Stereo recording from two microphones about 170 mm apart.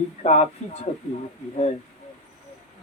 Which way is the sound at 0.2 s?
40° left (ahead or behind).